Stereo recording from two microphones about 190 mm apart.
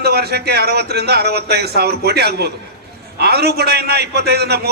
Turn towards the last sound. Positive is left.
turn(degrees=-55)  # may be behind; listen again after turning